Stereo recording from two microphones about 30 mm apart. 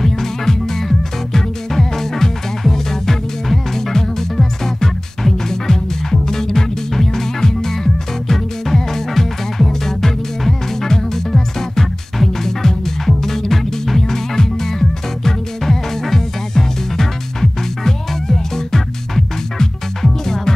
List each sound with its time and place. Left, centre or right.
0.0 s music: centre